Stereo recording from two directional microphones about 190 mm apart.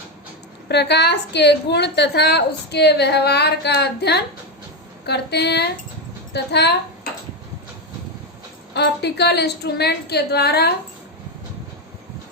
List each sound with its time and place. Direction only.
0.7 s a woman's voice: 60° left (ahead or behind)
8.7 s a woman's voice: 60° left (ahead or behind)